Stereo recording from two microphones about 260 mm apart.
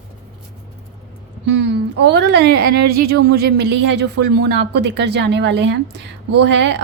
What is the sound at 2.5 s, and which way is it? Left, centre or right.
Speech, right.